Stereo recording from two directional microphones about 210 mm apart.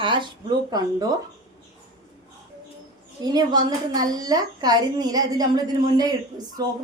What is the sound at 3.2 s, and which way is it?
Speech, 20° right (ahead or behind).